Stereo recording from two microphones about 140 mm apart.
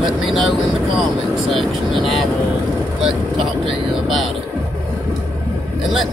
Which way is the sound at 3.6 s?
35° right (ahead or behind).